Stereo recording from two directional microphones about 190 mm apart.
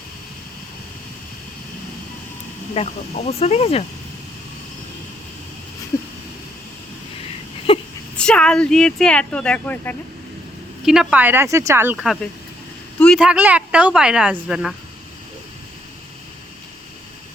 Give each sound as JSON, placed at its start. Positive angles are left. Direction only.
{"t": 2.7, "sound": "speech", "side_deg": 35}
{"t": 7.7, "sound": "a sound", "side_deg": 30}
{"t": 8.1, "sound": "speech", "side_deg": 5}
{"t": 10.8, "sound": "a woman's voice", "side_deg": -5}